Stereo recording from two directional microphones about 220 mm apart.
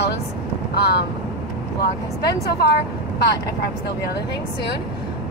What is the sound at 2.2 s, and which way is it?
Speech, 45° left (ahead or behind).